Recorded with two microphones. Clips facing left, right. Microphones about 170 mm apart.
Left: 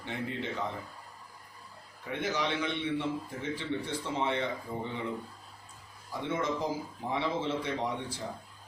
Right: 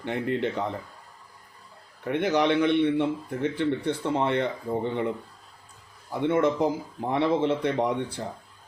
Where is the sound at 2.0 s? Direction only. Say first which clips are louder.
Right 9 dB; 65° right (ahead or behind).